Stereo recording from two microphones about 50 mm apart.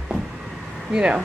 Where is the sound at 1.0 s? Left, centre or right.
Centre.